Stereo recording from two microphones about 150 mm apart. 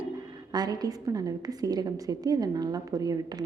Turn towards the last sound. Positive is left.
turn(degrees=-25)  # may be behind; listen again after turning